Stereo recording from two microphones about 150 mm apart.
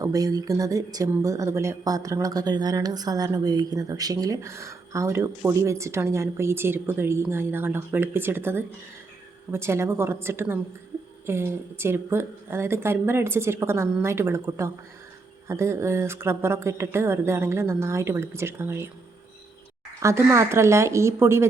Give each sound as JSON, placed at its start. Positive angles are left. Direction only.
{"t": 0.0, "sound": "speech", "side_deg": -25}
{"t": 20.0, "sound": "speech", "side_deg": -20}